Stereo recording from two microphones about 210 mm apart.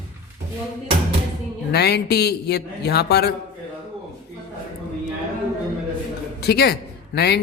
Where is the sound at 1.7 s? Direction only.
50° left (ahead or behind).